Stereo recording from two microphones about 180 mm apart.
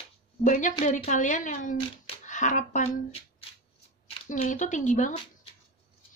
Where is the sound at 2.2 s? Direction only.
45° left (ahead or behind).